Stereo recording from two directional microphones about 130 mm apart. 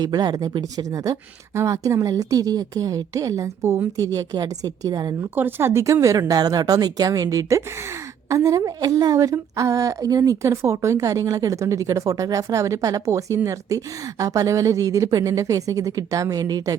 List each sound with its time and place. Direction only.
0.0 s a woman's voice: 30° right (ahead or behind)
5.3 s a woman's voice: 15° right (ahead or behind)